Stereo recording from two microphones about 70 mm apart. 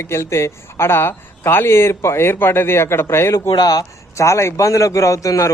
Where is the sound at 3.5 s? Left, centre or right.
Left.